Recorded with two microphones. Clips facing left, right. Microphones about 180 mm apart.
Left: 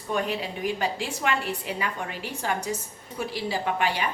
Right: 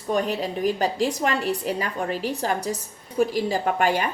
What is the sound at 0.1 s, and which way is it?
A woman's voice, 40° right (ahead or behind).